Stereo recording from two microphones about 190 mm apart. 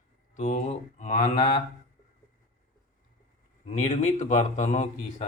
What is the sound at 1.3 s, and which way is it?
Mantra, 25° left (ahead or behind).